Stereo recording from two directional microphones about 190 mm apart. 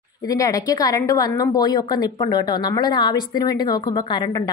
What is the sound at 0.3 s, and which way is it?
A woman's voice, 20° left (ahead or behind).